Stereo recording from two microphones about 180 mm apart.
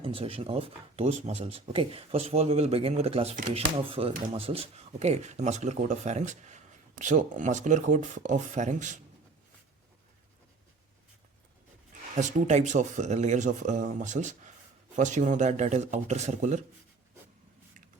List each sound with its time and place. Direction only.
0.0 s speech: 30° right (ahead or behind)
12.1 s speech: 40° right (ahead or behind)